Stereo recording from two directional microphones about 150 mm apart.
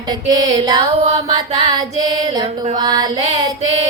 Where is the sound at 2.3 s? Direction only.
25° right (ahead or behind).